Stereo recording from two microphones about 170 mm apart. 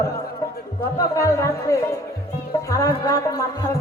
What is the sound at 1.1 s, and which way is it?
A woman's voice, 20° left (ahead or behind).